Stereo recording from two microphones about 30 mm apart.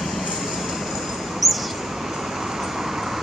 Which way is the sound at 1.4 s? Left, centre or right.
Centre.